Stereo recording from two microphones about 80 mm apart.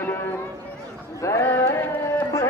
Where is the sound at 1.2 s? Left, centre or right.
Left.